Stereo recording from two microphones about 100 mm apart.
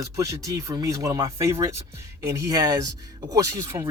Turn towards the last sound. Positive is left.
turn(degrees=-30)  # may be behind; listen again after turning